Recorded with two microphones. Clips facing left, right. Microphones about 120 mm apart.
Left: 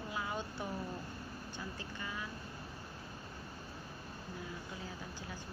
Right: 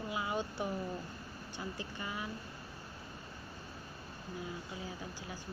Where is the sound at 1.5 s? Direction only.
15° right (ahead or behind).